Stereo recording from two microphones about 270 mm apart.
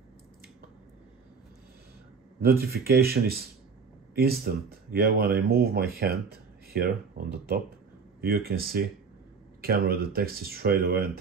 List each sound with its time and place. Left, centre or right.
2.4 s speech: right